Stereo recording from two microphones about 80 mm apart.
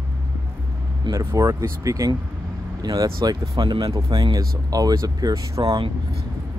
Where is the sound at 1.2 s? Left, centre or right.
Right.